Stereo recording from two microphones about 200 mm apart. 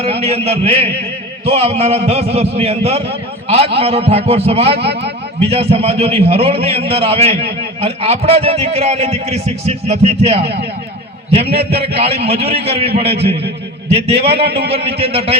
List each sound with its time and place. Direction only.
0.0 s a man's voice: 30° right (ahead or behind)
5.0 s a sound: 30° right (ahead or behind)
5.7 s a man's voice: 30° right (ahead or behind)
10.4 s a man's voice: 55° right (ahead or behind)
11.3 s a man's voice: 30° right (ahead or behind)
13.9 s a man's voice: 30° right (ahead or behind)